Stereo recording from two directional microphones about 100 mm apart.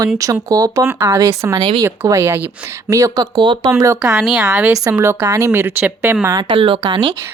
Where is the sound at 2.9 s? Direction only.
35° right (ahead or behind).